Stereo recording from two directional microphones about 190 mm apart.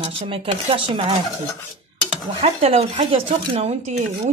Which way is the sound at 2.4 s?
35° right (ahead or behind).